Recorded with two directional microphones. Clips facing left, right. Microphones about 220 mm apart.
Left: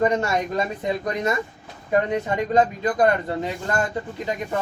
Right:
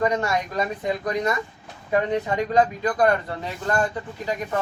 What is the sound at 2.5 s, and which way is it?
Speech, 25° left (ahead or behind).